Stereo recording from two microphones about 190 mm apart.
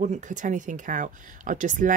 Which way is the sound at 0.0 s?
40° right (ahead or behind).